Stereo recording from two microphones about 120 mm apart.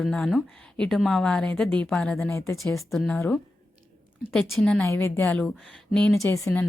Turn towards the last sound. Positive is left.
turn(degrees=25)  # may be behind; listen again after turning